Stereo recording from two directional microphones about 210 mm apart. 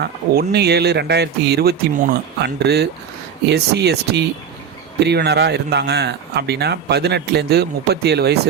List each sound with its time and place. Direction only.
0.0 s speech: 50° right (ahead or behind)